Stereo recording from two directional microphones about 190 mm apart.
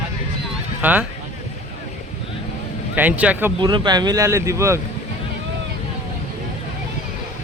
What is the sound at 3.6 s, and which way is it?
Speech, 25° right (ahead or behind).